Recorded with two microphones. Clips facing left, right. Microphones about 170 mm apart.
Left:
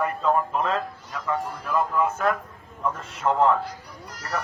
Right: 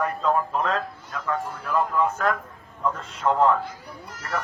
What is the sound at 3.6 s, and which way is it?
Speech, 40° left (ahead or behind).